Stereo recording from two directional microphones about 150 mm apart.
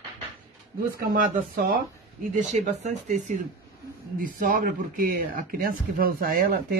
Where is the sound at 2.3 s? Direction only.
50° right (ahead or behind).